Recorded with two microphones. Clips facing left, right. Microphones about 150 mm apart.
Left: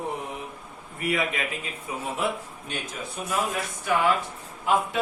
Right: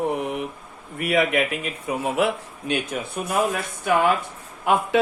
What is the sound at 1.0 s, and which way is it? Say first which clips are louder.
A man's voice: right 7 dB; 75° right (ahead or behind).